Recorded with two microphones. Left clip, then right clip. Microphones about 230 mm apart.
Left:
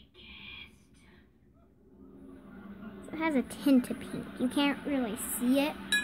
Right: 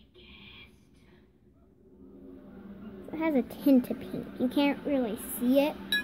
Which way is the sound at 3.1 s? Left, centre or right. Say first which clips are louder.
Right 2 dB; centre.